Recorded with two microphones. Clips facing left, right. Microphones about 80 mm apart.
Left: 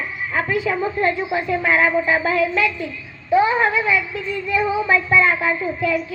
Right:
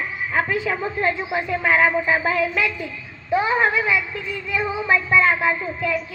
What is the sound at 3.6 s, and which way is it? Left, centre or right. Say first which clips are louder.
Speech: left 1 dB; centre.